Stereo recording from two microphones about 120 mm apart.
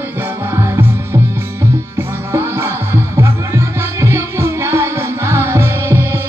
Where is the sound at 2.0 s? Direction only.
20° right (ahead or behind).